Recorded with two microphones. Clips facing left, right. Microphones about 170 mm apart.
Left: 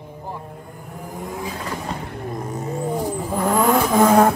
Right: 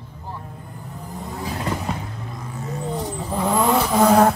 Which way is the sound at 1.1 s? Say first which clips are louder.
Left 2 dB; 15° left (ahead or behind).